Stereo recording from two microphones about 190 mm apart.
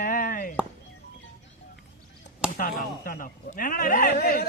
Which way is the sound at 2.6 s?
50° left (ahead or behind).